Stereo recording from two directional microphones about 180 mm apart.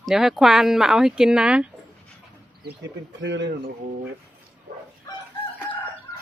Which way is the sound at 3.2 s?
80° right.